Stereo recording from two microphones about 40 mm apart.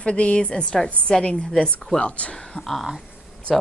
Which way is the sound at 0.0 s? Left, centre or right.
Left.